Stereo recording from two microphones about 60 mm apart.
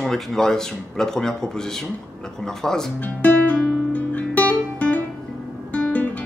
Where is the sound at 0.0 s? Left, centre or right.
Centre.